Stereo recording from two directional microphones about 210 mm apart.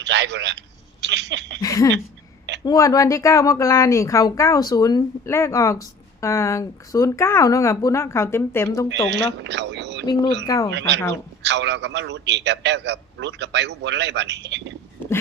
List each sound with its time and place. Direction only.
0.0 s a man's voice: 55° right (ahead or behind)
1.6 s a woman's voice: 15° left (ahead or behind)
8.9 s a man's voice: 55° right (ahead or behind)
10.4 s a woman's voice: 15° left (ahead or behind)
10.7 s a man's voice: 55° right (ahead or behind)